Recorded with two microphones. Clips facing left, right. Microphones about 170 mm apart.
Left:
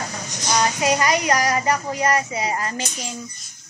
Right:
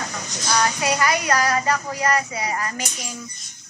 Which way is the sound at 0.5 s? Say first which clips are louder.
Left 2 dB; 20° left (ahead or behind).